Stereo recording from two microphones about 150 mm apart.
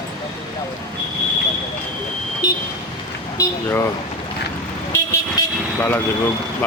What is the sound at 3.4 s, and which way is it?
Speech, 20° left (ahead or behind).